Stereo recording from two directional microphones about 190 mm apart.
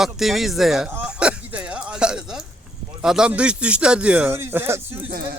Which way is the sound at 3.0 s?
5° right (ahead or behind).